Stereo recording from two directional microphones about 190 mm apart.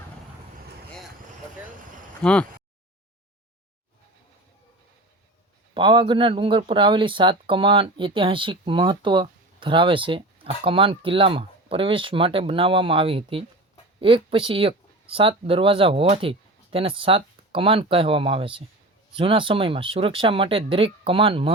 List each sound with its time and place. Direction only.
2.2 s speech: 5° left (ahead or behind)
5.7 s speech: 25° right (ahead or behind)